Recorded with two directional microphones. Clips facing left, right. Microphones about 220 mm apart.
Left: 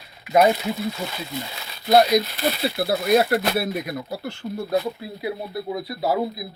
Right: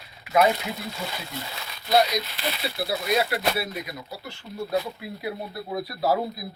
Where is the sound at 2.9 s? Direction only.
50° left (ahead or behind).